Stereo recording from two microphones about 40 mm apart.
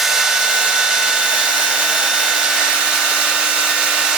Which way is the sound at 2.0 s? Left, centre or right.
Centre.